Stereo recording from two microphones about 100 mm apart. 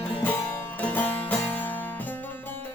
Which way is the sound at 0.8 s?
15° left (ahead or behind).